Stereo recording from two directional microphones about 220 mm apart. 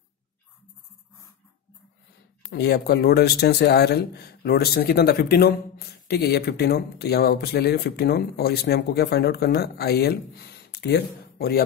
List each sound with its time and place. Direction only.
2.5 s speech: 50° left (ahead or behind)